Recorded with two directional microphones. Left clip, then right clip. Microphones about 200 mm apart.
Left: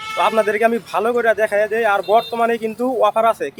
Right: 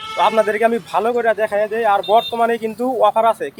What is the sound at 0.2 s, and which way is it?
A man's voice, centre (ahead or behind).